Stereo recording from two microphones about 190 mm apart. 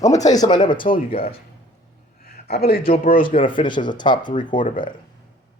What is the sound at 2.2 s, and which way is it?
A man's voice, 55° left (ahead or behind).